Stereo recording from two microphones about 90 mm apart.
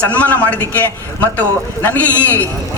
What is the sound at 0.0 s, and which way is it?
A man's voice, 15° left (ahead or behind).